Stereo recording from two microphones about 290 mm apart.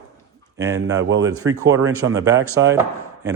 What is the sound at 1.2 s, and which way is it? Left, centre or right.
A man's voice, centre.